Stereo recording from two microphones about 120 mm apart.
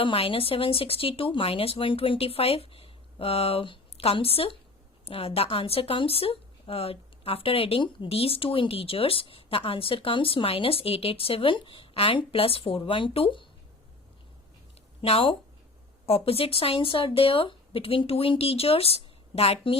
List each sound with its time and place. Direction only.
0.0 s speech: 50° left (ahead or behind)
15.0 s speech: 50° left (ahead or behind)